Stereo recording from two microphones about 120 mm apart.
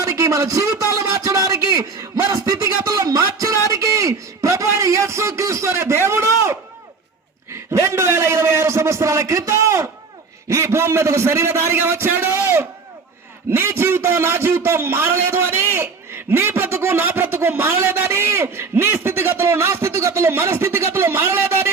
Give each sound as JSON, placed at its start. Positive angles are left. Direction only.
{"t": 0.0, "sound": "a man's voice", "side_deg": -30}
{"t": 3.7, "sound": "a sound", "side_deg": -25}
{"t": 7.7, "sound": "a man's voice", "side_deg": -25}